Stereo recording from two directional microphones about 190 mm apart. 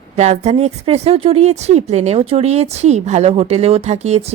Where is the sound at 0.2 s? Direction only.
35° right (ahead or behind).